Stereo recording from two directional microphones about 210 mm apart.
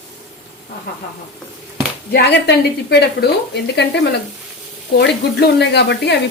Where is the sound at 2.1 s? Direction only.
50° left (ahead or behind).